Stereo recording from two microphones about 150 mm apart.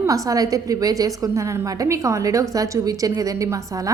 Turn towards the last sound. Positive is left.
turn(degrees=-25)  # may be behind; listen again after turning